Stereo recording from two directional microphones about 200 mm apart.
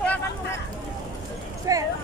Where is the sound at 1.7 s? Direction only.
15° right (ahead or behind).